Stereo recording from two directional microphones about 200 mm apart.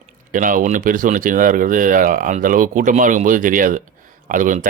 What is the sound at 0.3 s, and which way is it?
Speech, 40° right (ahead or behind).